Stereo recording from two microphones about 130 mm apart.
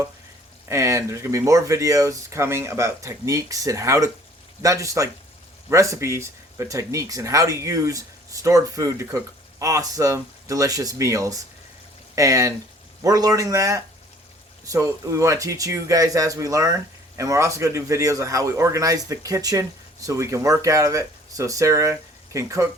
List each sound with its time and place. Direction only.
0.7 s speech: 20° right (ahead or behind)